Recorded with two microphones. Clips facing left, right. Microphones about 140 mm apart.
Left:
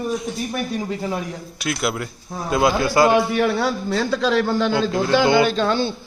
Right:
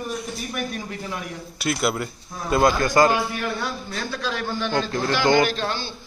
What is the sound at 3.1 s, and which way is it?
A man's voice, 75° left (ahead or behind).